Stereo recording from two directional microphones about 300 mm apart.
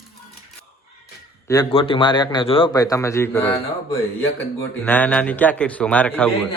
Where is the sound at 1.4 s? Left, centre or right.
Centre.